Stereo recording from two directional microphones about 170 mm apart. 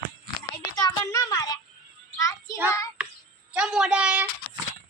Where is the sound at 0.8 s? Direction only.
20° left (ahead or behind).